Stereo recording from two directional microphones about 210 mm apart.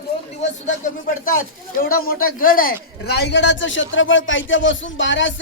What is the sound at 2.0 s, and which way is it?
A man's voice, 45° left (ahead or behind).